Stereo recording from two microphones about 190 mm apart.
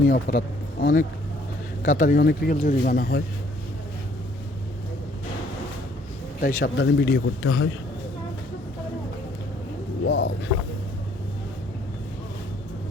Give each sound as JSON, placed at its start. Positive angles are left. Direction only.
{"t": 0.1, "sound": "speech", "side_deg": 55}
{"t": 6.4, "sound": "speech", "side_deg": 55}
{"t": 10.1, "sound": "speech", "side_deg": 70}